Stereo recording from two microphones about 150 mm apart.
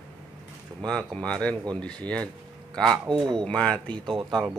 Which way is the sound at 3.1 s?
30° right (ahead or behind).